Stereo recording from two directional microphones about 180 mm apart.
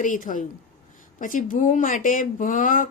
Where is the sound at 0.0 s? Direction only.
45° left (ahead or behind).